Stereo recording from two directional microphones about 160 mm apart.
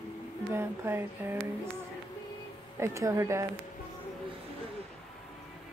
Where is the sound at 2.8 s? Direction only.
20° right (ahead or behind).